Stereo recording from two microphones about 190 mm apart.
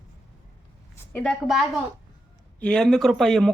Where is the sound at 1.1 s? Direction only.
Centre (ahead or behind).